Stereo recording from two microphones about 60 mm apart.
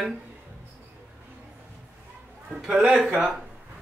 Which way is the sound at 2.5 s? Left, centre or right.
Centre.